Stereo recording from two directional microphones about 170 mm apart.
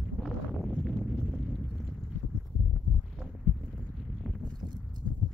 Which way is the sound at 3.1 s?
Centre (ahead or behind).